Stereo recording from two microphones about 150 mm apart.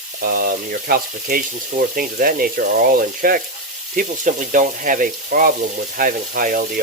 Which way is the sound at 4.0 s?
60° right (ahead or behind).